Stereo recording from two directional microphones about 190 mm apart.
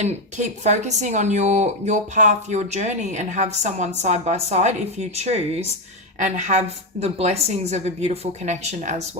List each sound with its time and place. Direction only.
0.0 s a woman's voice: 35° right (ahead or behind)